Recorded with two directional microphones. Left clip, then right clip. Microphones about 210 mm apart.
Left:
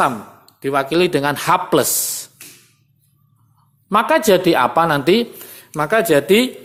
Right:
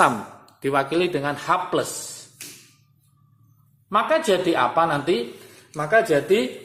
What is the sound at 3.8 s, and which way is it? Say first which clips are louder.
A man's voice: left 6 dB; 45° left (ahead or behind).